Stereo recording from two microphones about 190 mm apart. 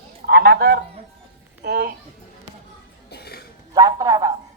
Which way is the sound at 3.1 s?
55° left (ahead or behind).